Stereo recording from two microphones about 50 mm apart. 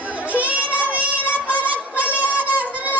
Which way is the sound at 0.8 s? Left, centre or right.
Right.